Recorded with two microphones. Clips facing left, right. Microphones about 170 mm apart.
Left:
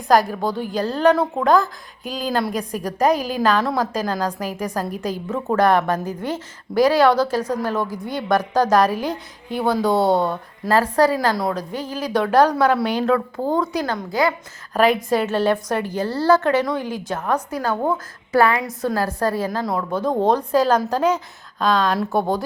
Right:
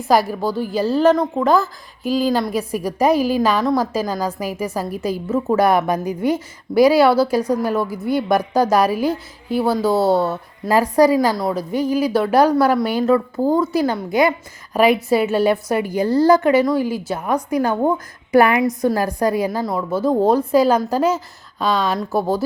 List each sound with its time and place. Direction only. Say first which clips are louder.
0.1 s a woman's voice: even; 5° right (ahead or behind)
13.8 s a woman's voice: right 4 dB; 15° right (ahead or behind)
14.7 s a woman's voice: right 2 dB; 10° right (ahead or behind)
19.5 s a woman's voice: right 2 dB; centre (ahead or behind)